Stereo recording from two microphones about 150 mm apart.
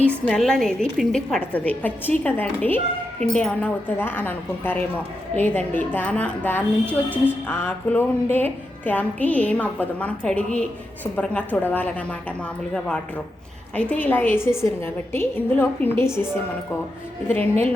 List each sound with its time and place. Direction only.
0.0 s a woman's voice: 10° left (ahead or behind)
13.7 s a woman's voice: 10° left (ahead or behind)